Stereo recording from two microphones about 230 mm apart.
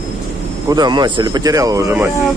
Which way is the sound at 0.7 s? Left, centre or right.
Centre.